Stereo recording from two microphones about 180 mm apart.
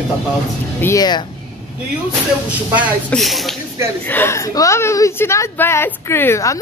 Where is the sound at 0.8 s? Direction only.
15° left (ahead or behind).